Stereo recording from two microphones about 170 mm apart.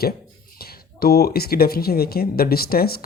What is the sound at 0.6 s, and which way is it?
Speech, 65° left (ahead or behind).